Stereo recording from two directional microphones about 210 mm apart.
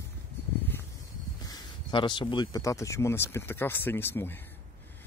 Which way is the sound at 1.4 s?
20° left (ahead or behind).